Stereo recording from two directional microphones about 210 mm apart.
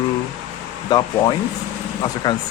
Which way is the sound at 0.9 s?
20° left (ahead or behind).